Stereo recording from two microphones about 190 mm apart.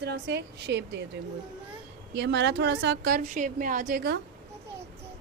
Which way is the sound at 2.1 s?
65° right (ahead or behind).